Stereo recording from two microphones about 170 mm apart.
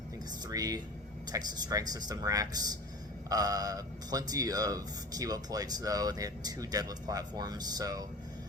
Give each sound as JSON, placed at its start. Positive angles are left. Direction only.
{"t": 0.4, "sound": "speech", "side_deg": -20}